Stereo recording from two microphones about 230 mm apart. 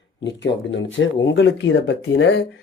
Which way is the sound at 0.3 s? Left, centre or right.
Left.